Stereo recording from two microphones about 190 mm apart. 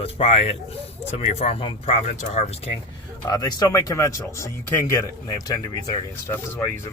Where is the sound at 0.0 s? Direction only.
30° left (ahead or behind).